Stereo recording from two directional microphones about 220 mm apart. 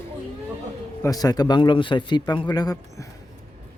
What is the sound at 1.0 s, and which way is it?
Speech, 15° left (ahead or behind).